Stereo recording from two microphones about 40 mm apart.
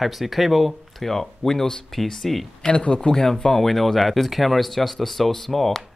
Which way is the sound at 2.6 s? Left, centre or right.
Left.